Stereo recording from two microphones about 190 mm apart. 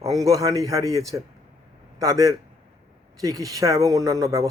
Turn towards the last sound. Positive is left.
turn(degrees=-15)  # may be behind; listen again after turning